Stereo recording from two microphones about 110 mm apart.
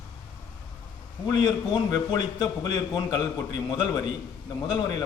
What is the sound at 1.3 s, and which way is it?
A man's voice, 40° left (ahead or behind).